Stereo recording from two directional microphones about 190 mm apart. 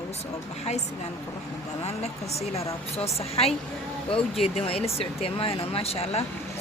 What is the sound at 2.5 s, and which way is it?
Speech, 30° left (ahead or behind).